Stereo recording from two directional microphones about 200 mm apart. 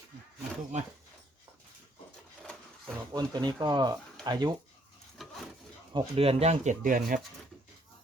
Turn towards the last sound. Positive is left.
turn(degrees=-45)  # may be behind; listen again after turning